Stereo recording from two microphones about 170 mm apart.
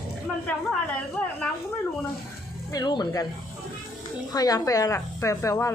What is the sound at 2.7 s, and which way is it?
Speech, 25° left (ahead or behind).